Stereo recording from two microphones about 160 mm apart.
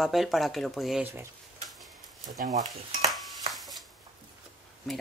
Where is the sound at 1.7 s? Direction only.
Centre (ahead or behind).